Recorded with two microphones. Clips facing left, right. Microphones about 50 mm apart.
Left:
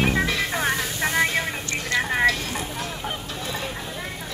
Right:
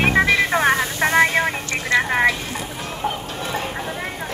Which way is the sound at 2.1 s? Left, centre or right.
Right.